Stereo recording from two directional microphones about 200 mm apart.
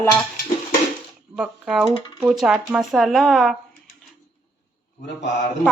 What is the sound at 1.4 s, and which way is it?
Speech, 5° right (ahead or behind).